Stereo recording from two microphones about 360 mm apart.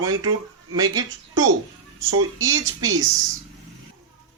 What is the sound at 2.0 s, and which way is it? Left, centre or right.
Speech, right.